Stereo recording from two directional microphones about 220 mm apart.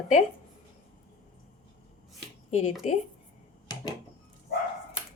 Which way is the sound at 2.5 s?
30° left (ahead or behind).